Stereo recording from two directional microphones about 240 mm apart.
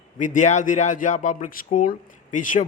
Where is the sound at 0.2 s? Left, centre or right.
Left.